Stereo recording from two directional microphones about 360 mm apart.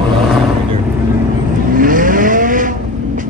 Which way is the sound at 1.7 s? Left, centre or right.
Right.